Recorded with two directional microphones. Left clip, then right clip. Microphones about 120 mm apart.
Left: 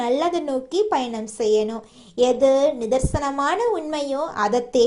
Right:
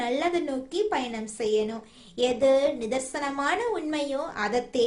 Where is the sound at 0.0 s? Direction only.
40° left (ahead or behind).